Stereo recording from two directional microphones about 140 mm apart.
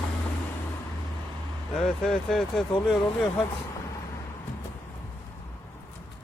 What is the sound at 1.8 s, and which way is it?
Speech, 5° left (ahead or behind).